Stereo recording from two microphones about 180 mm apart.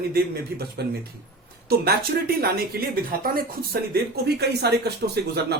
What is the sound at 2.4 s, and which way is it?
Speech, 60° right (ahead or behind).